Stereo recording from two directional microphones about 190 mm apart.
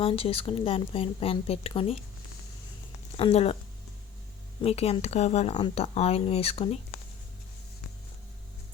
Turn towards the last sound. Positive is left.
turn(degrees=30)  # may be behind; listen again after turning